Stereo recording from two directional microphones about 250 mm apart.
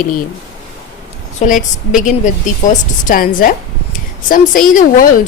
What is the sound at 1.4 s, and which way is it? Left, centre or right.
Speech, left.